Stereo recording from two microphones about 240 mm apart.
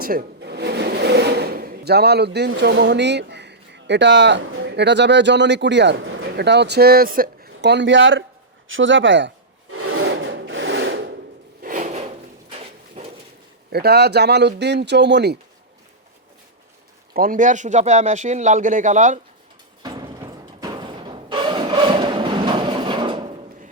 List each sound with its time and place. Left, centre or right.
0.0 s drawer open or close: right
2.5 s speech: right
8.6 s wood: right
11.6 s drawer open or close: right
13.7 s speech: right
17.2 s speech: right
19.8 s music: centre